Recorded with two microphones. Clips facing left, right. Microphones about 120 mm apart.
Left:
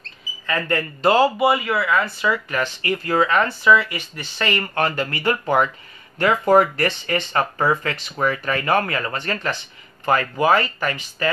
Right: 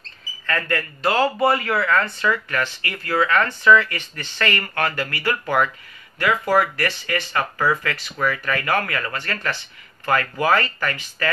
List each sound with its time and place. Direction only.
0.7 s speech: 25° left (ahead or behind)
1.4 s speech: 5° left (ahead or behind)